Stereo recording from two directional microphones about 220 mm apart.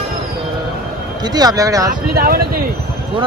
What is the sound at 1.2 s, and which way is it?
Speech, 15° right (ahead or behind).